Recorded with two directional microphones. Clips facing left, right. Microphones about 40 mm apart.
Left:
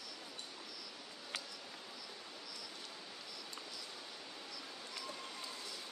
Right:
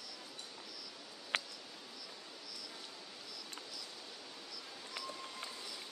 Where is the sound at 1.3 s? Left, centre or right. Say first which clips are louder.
Right 8 dB; right.